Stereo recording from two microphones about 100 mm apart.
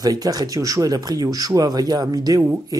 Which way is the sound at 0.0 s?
40° right (ahead or behind).